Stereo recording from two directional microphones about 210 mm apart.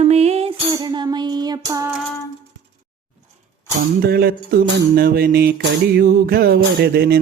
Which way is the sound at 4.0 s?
45° right (ahead or behind).